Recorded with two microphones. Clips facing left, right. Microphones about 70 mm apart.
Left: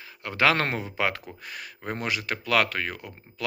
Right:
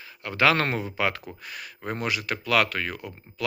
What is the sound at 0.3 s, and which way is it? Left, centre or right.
Speech, left.